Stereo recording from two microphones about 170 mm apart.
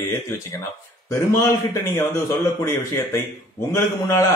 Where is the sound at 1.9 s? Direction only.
15° left (ahead or behind).